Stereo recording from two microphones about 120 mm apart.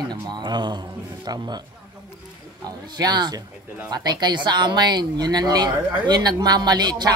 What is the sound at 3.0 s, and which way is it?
Speech, 35° right (ahead or behind).